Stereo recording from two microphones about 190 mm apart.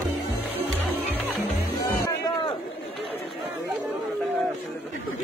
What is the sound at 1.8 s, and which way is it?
Music, 15° left (ahead or behind).